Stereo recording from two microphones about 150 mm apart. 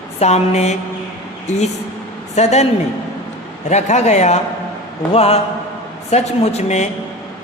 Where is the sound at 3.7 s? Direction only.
50° left (ahead or behind).